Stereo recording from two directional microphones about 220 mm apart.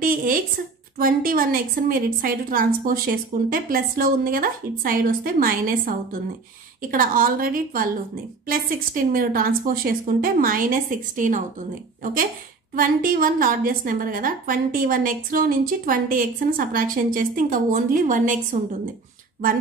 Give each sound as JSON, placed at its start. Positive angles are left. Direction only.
{"t": 0.0, "sound": "a woman's voice", "side_deg": -40}